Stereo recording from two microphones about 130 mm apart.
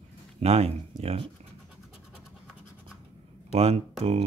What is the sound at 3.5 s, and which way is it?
Speech, 55° right (ahead or behind).